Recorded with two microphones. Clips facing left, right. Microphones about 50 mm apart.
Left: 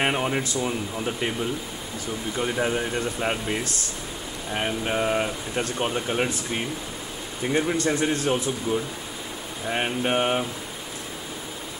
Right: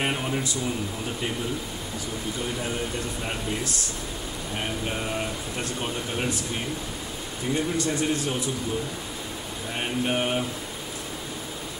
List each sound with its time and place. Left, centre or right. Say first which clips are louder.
0.0 s speech: left 3 dB; left
4.6 s speech: left 6 dB; left
7.5 s a man's voice: left 3 dB; left
9.7 s a man's voice: left 3 dB; left